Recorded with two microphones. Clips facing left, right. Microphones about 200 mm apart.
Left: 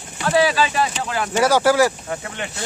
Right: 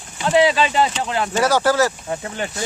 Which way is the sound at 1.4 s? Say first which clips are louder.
Left 2 dB; 10° left (ahead or behind).